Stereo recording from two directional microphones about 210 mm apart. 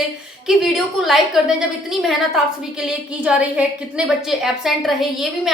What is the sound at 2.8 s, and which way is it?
A woman's voice, 5° right (ahead or behind).